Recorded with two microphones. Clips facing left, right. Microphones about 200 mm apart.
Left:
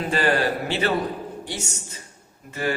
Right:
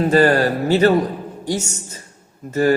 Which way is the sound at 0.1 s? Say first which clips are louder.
Right 5 dB; 40° right (ahead or behind).